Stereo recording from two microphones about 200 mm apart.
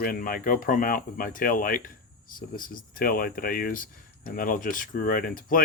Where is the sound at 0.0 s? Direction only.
45° left (ahead or behind).